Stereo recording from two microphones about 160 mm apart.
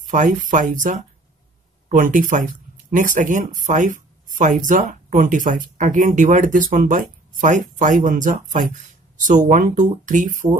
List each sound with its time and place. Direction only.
0.0 s speech: 50° right (ahead or behind)